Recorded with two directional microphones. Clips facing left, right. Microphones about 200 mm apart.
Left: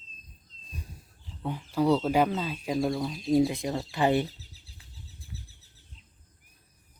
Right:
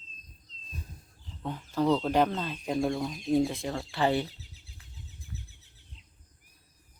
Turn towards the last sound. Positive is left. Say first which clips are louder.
# right 1 dB
turn(degrees=35)  # may be behind; listen again after turning